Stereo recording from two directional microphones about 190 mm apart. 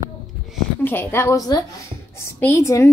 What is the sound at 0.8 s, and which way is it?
A woman's voice, 10° left (ahead or behind).